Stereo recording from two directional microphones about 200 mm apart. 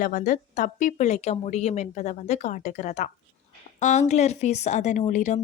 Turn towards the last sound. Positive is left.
turn(degrees=35)  # may be behind; listen again after turning